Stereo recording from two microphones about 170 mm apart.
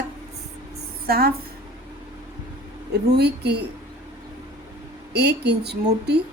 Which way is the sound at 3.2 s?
75° right (ahead or behind).